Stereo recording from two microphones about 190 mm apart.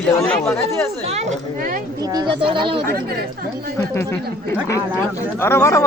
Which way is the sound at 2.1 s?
25° right (ahead or behind).